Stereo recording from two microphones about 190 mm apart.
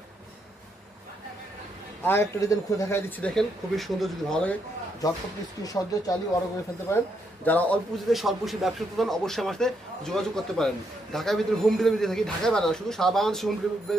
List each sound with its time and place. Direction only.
2.0 s speech: 15° left (ahead or behind)
5.6 s a man's voice: 20° left (ahead or behind); by 13.9 s centre (ahead or behind)